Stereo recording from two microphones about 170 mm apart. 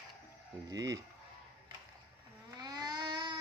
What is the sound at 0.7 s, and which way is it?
Speech, 20° right (ahead or behind).